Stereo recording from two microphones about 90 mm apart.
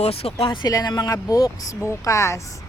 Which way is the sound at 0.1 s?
90° left.